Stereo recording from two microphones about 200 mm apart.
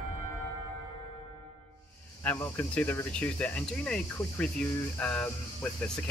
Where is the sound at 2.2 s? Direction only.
10° left (ahead or behind).